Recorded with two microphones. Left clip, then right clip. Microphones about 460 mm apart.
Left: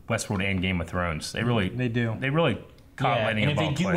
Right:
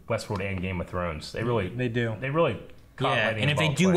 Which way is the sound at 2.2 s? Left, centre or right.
Right.